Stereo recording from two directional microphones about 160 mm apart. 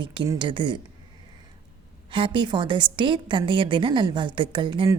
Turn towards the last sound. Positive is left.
turn(degrees=-30)  # may be behind; listen again after turning